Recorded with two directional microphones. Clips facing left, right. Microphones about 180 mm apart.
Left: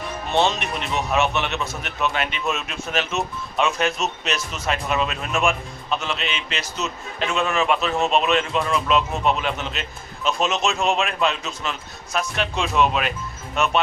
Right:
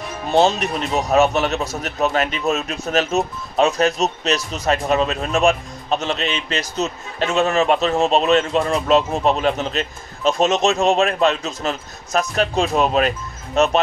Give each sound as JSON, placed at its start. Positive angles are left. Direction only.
{"t": 0.3, "sound": "speech", "side_deg": -40}